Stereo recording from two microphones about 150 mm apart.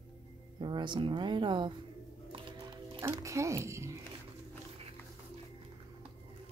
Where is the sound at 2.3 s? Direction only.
35° right (ahead or behind).